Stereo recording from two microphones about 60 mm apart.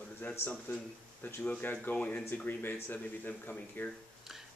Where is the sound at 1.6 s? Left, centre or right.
Left.